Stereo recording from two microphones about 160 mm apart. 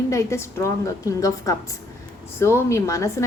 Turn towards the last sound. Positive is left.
turn(degrees=20)  # may be behind; listen again after turning